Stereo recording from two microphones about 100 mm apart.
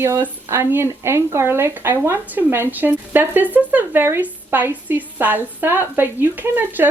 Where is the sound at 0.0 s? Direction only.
25° right (ahead or behind).